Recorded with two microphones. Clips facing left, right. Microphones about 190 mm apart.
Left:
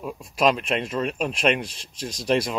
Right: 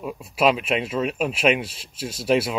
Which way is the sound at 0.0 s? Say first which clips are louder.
Right 1 dB; 5° right (ahead or behind).